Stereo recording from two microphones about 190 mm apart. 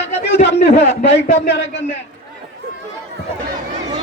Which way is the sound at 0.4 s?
65° left (ahead or behind).